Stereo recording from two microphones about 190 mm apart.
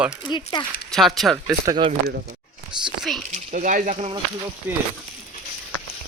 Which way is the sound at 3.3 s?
40° right (ahead or behind).